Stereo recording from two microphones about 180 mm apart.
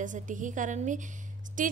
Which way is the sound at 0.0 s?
45° right (ahead or behind).